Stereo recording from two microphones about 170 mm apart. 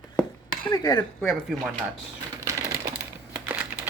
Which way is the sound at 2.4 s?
20° right (ahead or behind).